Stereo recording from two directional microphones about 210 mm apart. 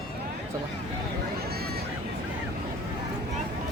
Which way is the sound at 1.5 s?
50° right (ahead or behind).